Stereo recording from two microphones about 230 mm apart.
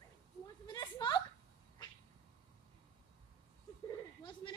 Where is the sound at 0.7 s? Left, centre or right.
Centre.